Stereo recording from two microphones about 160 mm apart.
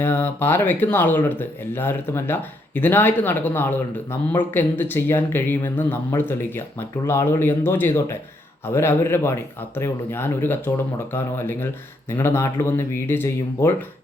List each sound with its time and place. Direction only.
0.0 s speech: 15° left (ahead or behind)